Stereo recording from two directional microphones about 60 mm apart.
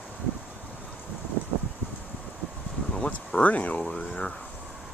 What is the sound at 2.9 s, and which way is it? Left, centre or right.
Speech, centre.